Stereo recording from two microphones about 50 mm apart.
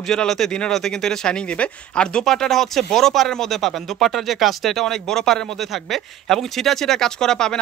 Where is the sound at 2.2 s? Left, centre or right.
Centre.